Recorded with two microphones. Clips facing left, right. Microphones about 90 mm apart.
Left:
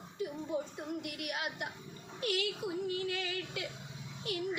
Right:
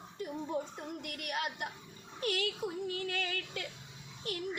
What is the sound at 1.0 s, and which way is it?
Female singing, 50° right (ahead or behind).